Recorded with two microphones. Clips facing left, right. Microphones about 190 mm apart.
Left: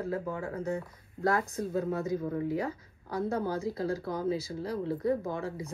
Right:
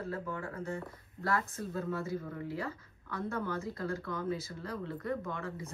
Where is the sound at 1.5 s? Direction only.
40° left (ahead or behind).